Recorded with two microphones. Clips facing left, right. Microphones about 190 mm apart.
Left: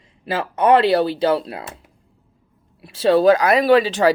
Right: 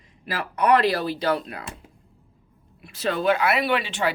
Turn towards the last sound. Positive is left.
turn(degrees=40)  # may be behind; listen again after turning